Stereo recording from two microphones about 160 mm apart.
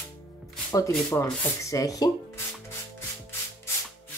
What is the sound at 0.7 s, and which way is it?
Speech, 20° left (ahead or behind).